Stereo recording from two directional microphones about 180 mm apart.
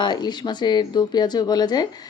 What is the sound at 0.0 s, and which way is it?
A woman's voice, 25° left (ahead or behind).